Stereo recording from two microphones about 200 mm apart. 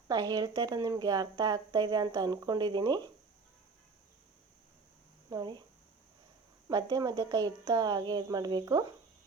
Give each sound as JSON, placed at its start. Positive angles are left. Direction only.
{"t": 0.1, "sound": "a woman's voice", "side_deg": -20}
{"t": 5.3, "sound": "a woman's voice", "side_deg": -20}
{"t": 6.7, "sound": "a woman's voice", "side_deg": -20}